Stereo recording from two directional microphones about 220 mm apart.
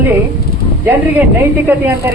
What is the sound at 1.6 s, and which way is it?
Speech, 10° right (ahead or behind).